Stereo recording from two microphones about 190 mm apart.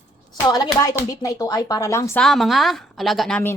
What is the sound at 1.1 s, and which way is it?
Speech, 20° left (ahead or behind).